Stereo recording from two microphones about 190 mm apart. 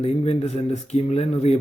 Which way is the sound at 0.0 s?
35° left (ahead or behind).